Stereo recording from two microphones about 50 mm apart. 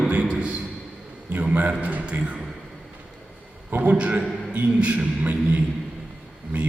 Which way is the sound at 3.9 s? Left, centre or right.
Right.